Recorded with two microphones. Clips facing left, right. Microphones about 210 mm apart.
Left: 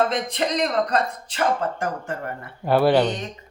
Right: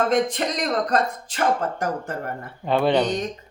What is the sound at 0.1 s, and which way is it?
Music, 45° right (ahead or behind).